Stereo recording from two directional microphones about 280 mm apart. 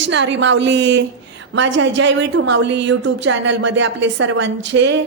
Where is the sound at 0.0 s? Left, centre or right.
Right.